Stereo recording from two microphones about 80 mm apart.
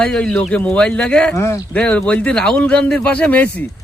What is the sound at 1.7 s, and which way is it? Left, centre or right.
Speech, centre.